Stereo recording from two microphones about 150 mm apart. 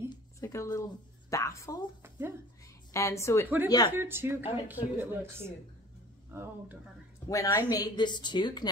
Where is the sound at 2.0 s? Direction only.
15° right (ahead or behind).